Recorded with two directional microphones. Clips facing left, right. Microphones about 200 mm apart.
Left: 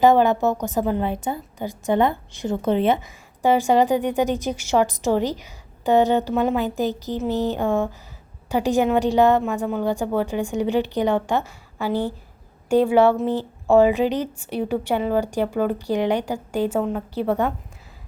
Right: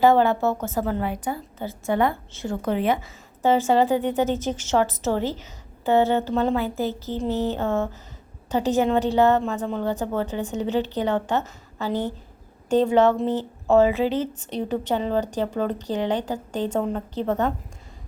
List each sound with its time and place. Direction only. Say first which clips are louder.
0.0 s a woman's voice: left 2 dB; 15° left (ahead or behind)
3.4 s speech: left 2 dB; 15° left (ahead or behind)